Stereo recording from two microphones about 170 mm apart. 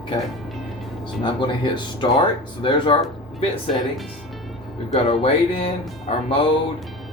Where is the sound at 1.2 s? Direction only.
30° left (ahead or behind).